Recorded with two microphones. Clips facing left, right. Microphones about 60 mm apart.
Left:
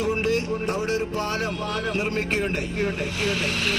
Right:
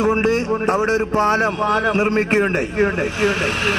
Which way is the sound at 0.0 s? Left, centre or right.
Right.